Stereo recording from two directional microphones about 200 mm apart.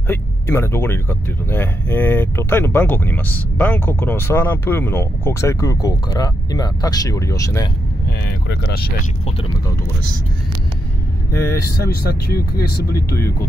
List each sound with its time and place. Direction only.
0.1 s speech: 10° left (ahead or behind)
8.5 s speech: 55° left (ahead or behind)
11.8 s speech: 50° left (ahead or behind)